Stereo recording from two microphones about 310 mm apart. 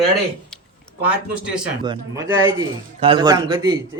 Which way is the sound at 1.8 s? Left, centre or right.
Centre.